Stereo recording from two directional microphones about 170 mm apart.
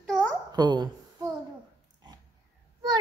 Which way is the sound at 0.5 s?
25° right (ahead or behind).